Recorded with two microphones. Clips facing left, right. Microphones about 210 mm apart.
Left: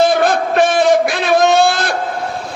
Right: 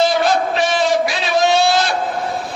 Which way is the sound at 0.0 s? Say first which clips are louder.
Left 3 dB; 55° left (ahead or behind).